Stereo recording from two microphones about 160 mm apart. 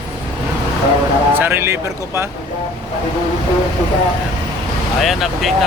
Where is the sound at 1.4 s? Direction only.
15° right (ahead or behind).